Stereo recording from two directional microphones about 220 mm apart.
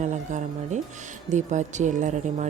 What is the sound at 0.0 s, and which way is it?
A woman's voice, 35° right (ahead or behind).